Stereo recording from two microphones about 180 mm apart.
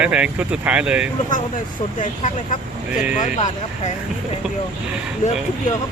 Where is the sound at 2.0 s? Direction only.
45° left (ahead or behind).